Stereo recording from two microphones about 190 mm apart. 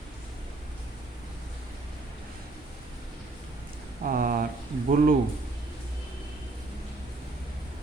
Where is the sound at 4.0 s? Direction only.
45° right (ahead or behind).